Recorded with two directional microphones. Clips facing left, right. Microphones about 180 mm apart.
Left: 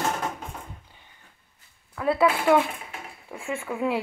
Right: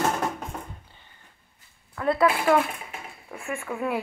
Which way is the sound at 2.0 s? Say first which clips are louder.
Even; 5° left (ahead or behind).